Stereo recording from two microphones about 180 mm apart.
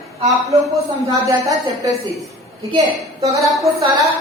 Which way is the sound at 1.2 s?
20° right (ahead or behind).